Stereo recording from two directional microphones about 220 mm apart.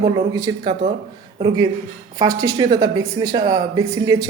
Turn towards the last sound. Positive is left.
turn(degrees=-15)  # may be behind; listen again after turning